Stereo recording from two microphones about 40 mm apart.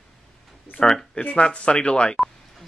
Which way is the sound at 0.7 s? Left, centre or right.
Left.